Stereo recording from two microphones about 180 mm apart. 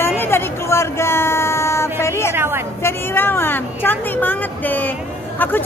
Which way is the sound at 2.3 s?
15° right (ahead or behind).